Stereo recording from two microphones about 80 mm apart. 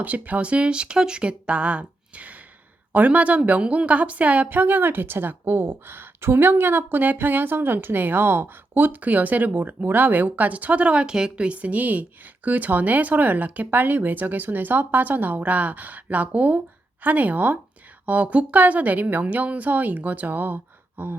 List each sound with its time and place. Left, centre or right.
0.0 s a woman's voice: centre